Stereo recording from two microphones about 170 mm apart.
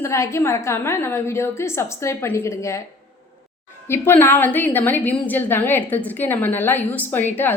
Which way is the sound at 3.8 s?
15° left (ahead or behind).